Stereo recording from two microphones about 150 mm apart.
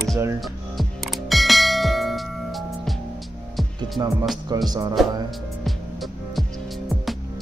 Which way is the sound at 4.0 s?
25° right (ahead or behind).